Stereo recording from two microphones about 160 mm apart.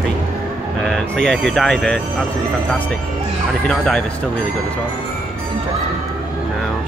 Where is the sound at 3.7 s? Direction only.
5° left (ahead or behind).